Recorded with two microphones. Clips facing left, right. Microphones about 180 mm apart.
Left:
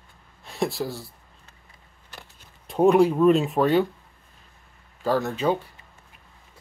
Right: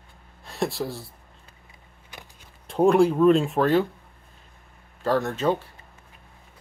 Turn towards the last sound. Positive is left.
turn(degrees=0)  # may be behind; listen again after turning